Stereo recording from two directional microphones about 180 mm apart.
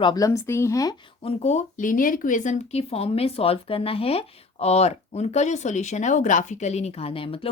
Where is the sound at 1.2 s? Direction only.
35° left (ahead or behind).